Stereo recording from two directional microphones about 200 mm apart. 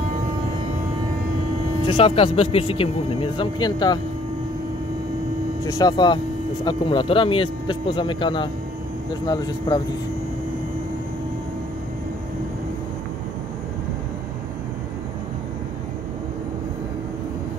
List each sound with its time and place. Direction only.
1.9 s speech: 25° left (ahead or behind)
5.6 s speech: 20° left (ahead or behind)